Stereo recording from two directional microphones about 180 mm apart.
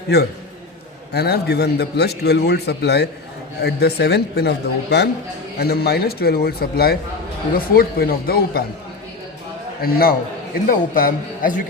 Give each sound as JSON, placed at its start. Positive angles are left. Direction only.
{"t": 0.1, "sound": "a man's voice", "side_deg": 65}
{"t": 9.8, "sound": "a man's voice", "side_deg": 55}